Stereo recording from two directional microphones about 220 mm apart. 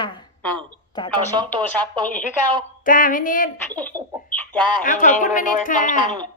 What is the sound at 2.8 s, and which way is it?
Speech, 35° left (ahead or behind).